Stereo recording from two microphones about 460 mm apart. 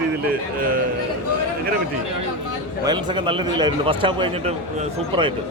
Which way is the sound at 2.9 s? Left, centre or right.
Centre.